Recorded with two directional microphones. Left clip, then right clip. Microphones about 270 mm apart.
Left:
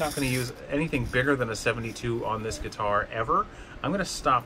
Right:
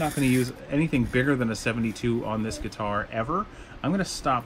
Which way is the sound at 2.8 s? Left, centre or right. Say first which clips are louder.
Left 3 dB; left.